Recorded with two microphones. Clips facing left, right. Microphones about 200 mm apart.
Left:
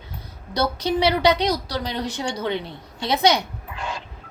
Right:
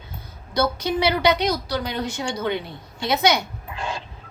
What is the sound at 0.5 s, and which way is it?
A woman's voice, 35° left (ahead or behind).